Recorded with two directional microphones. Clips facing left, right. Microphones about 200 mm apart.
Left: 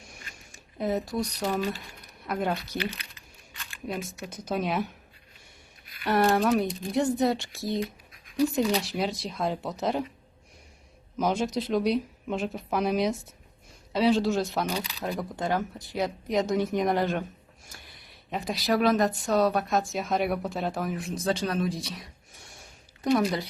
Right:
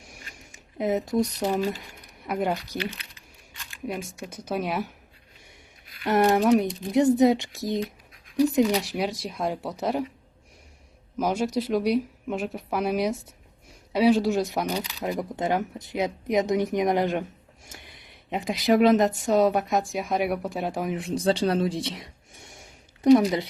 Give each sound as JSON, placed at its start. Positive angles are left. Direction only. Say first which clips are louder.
{"t": 0.8, "sound": "a woman's voice", "louder": "right 4 dB", "side_deg": -20}
{"t": 6.1, "sound": "speech", "louder": "right 3 dB", "side_deg": -15}
{"t": 11.2, "sound": "speech", "louder": "right 2 dB", "side_deg": -10}
{"t": 18.3, "sound": "a woman's voice", "louder": "right 5 dB", "side_deg": -20}
{"t": 21.0, "sound": "a woman's voice", "louder": "right 7 dB", "side_deg": -30}